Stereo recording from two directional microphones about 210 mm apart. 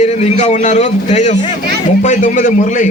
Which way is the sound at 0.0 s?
30° left (ahead or behind).